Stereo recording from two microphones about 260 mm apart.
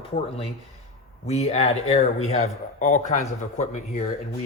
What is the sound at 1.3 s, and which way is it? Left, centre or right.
Speech, left.